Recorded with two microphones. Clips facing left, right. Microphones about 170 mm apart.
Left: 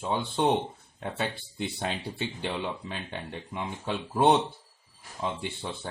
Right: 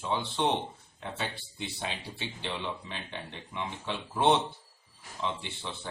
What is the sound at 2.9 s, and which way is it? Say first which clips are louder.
Speech: left 4 dB; 45° left (ahead or behind).